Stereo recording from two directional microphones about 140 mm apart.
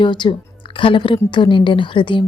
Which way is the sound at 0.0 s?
35° left (ahead or behind).